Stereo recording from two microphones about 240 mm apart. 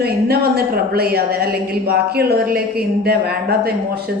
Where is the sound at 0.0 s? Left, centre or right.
Right.